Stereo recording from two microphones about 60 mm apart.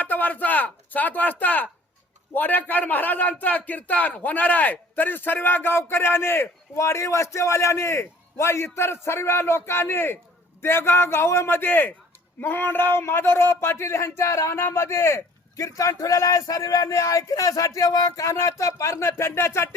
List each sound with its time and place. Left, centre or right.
0.0 s a man's voice: left